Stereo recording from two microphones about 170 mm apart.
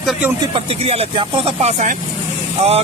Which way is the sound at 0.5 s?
35° right (ahead or behind).